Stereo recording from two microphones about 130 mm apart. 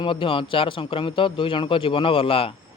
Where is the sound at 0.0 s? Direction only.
40° left (ahead or behind).